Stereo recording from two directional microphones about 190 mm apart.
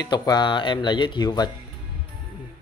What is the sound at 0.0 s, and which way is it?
Speech, 20° left (ahead or behind).